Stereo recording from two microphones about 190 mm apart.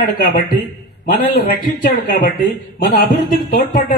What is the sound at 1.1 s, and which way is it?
A man's voice, 50° left (ahead or behind).